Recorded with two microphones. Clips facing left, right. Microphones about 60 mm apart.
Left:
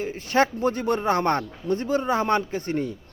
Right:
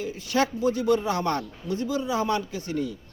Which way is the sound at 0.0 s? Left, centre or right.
Left.